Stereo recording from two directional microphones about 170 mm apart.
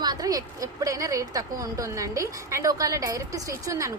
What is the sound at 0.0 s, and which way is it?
A woman's voice, 25° right (ahead or behind).